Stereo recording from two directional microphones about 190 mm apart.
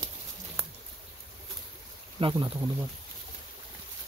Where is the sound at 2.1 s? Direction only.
25° right (ahead or behind).